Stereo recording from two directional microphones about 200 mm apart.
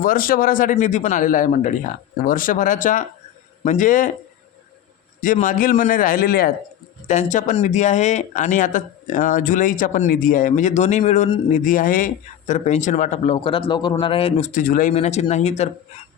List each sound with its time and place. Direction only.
0.0 s speech: 45° left (ahead or behind)
5.2 s speech: 40° left (ahead or behind)